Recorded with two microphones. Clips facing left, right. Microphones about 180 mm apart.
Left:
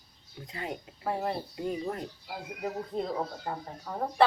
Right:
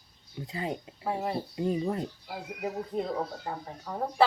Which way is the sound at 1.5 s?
25° right (ahead or behind).